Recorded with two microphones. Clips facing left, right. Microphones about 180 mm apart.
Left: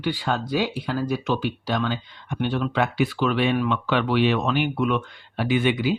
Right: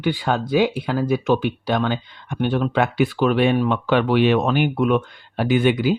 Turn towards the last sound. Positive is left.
turn(degrees=-45)  # may be behind; listen again after turning